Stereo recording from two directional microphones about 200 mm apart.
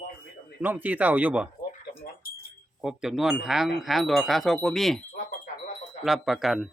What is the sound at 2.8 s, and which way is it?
Speech, 5° right (ahead or behind).